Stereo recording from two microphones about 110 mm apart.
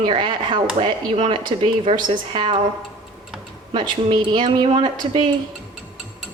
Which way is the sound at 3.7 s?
45° right (ahead or behind).